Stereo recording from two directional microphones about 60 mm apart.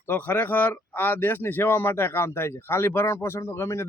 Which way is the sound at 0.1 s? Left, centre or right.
Left.